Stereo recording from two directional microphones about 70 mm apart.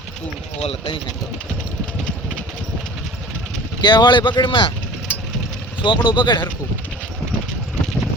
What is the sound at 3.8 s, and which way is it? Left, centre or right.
Speech, left.